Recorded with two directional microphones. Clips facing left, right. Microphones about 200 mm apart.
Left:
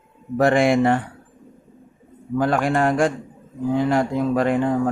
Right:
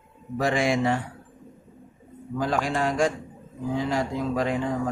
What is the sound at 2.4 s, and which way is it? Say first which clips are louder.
Music: left 6 dB; 60° left (ahead or behind).